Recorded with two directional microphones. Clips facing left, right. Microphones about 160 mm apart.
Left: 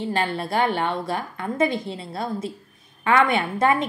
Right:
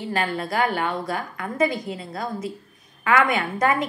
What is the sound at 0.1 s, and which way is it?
A woman's voice, 25° left (ahead or behind).